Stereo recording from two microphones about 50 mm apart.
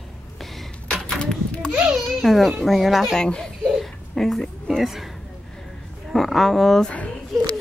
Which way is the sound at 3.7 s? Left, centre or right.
Centre.